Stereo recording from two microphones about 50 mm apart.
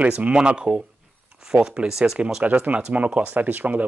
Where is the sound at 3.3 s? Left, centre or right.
Right.